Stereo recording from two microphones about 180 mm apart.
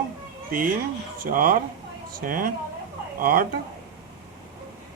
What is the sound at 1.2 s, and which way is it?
Speech, 50° right (ahead or behind).